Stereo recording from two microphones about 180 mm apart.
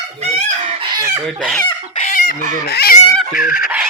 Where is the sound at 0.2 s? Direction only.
35° right (ahead or behind).